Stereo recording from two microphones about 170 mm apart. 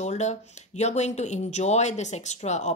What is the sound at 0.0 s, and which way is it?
Speech, 40° left (ahead or behind).